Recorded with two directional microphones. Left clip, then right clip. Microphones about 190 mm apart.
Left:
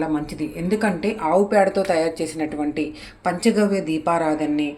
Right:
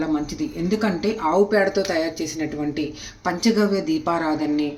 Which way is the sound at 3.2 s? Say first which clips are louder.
Left 1 dB; 5° left (ahead or behind).